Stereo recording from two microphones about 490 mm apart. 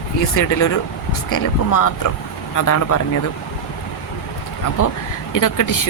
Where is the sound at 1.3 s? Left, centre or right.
Left.